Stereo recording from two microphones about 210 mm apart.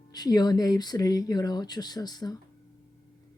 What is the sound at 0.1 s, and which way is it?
Speech, 20° left (ahead or behind).